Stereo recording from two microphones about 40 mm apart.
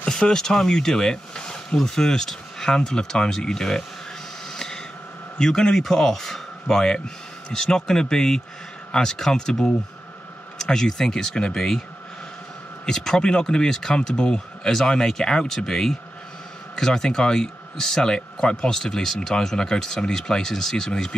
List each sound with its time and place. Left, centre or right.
0.0 s speech: left
1.3 s a sound: left
1.8 s speech: centre
4.6 s a sound: centre
5.4 s speech: centre
12.8 s speech: centre